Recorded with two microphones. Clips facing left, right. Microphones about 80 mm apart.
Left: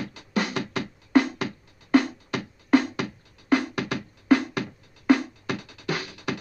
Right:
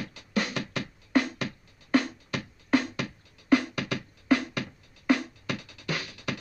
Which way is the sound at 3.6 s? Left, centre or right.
Left.